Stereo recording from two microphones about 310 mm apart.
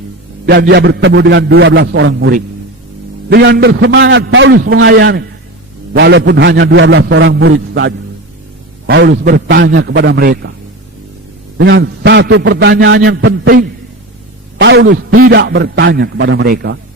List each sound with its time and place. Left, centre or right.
0.4 s a man's voice: right
11.5 s a man's voice: right